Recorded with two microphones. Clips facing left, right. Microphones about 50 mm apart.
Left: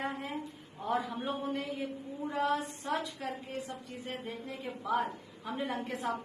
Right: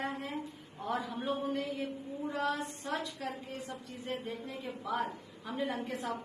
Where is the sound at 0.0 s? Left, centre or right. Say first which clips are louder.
Left 1 dB; centre.